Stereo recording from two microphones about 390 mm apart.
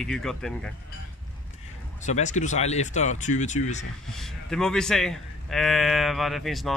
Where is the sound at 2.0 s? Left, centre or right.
Centre.